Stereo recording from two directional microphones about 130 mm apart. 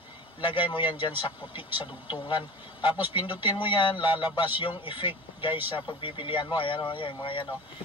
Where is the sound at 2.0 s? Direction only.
35° left (ahead or behind).